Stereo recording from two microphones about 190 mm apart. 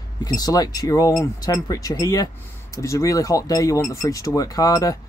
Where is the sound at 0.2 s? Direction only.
20° left (ahead or behind).